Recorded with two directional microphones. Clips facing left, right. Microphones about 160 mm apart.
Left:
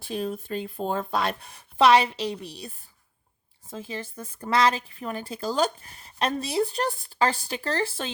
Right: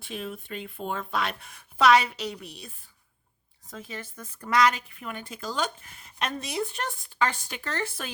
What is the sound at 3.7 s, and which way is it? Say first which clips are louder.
A woman's voice: left 4 dB; 30° left (ahead or behind).